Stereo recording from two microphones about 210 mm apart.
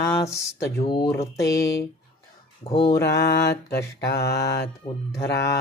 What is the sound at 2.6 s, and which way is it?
Speech, 30° left (ahead or behind).